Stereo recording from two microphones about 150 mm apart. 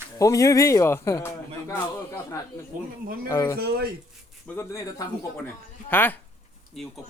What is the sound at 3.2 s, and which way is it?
Speech, 20° left (ahead or behind).